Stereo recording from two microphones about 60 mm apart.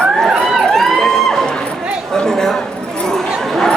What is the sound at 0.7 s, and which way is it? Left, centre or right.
Music, centre.